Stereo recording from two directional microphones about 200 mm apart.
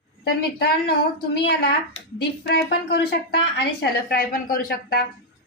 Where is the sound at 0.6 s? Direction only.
50° left (ahead or behind).